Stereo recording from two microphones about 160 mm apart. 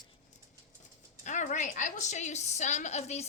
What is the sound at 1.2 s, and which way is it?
A woman's voice, 50° left (ahead or behind).